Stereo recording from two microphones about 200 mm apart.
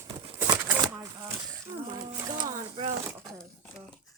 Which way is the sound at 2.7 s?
35° right (ahead or behind).